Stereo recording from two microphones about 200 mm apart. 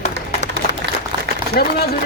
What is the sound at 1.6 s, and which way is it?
Speech, 45° left (ahead or behind).